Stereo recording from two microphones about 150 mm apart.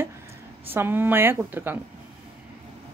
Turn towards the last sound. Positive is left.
turn(degrees=-15)  # may be behind; listen again after turning